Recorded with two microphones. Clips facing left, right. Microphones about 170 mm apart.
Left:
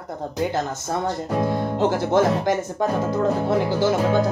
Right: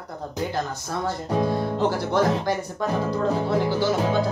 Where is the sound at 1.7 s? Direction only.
20° left (ahead or behind).